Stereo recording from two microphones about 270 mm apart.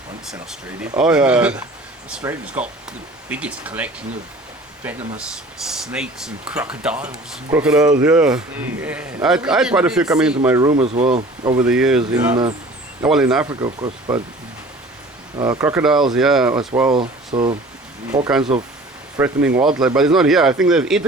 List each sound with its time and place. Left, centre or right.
0.8 s speech: centre; by 11.5 s right
11.5 s speech: centre
15.4 s speech: centre
16.6 s speech: centre